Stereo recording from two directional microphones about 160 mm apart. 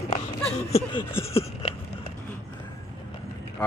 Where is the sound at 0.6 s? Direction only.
40° left (ahead or behind).